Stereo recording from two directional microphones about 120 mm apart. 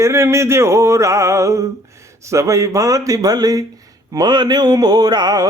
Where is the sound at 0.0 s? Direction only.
20° right (ahead or behind).